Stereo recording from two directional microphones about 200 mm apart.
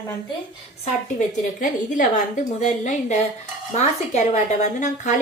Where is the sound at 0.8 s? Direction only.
40° left (ahead or behind).